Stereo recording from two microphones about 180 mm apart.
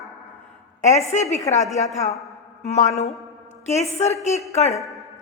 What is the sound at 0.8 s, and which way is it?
A woman's voice, 40° left (ahead or behind).